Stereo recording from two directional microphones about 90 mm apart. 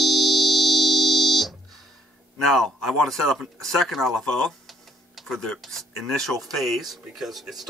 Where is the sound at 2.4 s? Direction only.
5° left (ahead or behind).